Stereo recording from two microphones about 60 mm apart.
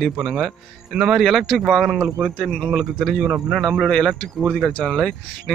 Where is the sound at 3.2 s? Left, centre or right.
Centre.